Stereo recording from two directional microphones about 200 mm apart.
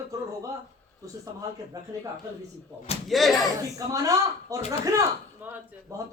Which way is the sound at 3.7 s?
15° right (ahead or behind).